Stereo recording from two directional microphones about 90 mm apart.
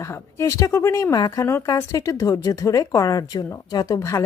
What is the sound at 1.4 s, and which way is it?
Speech, 30° left (ahead or behind).